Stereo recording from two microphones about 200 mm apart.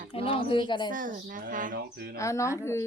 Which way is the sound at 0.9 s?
40° right (ahead or behind).